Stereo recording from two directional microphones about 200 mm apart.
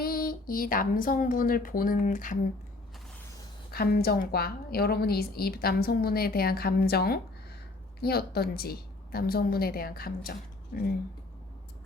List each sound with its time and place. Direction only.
0.0 s speech: 45° left (ahead or behind)
3.7 s a woman's voice: 50° left (ahead or behind)